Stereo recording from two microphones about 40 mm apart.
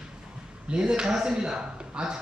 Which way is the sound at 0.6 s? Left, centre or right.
Right.